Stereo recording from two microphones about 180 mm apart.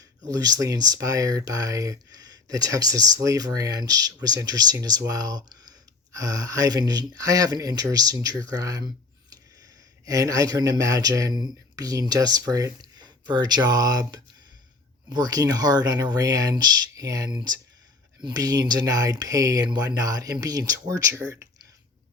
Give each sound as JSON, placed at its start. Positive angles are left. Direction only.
{"t": 0.3, "sound": "speech", "side_deg": -20}
{"t": 10.1, "sound": "speech", "side_deg": -20}